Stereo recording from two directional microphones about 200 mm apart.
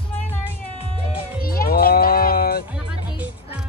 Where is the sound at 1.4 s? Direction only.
45° left (ahead or behind).